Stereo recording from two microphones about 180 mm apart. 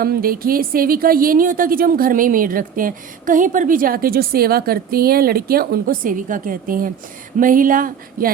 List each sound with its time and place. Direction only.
0.0 s speech: 55° right (ahead or behind)